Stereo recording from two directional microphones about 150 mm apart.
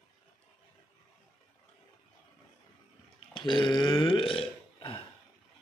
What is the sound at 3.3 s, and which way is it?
Burping, 30° left (ahead or behind).